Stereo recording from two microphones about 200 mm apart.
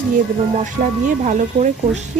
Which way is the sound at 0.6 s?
40° right (ahead or behind).